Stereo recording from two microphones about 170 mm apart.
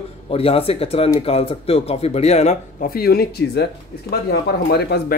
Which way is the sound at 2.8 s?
60° left (ahead or behind).